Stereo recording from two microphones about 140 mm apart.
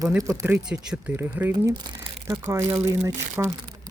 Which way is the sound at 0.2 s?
15° right (ahead or behind).